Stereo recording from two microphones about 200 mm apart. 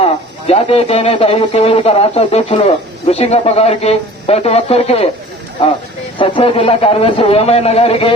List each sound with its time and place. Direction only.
0.0 s speech: 30° left (ahead or behind)
6.1 s speech: 25° left (ahead or behind)